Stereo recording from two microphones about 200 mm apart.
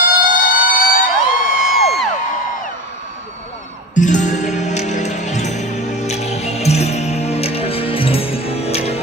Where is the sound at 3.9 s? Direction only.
40° left (ahead or behind).